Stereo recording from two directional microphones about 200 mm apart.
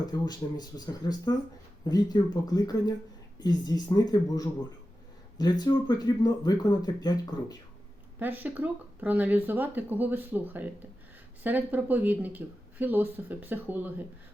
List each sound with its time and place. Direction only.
0.1 s speech: 20° left (ahead or behind)
8.2 s speech: 10° right (ahead or behind)